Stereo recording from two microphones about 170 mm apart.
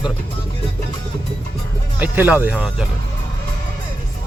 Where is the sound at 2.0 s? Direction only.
10° right (ahead or behind).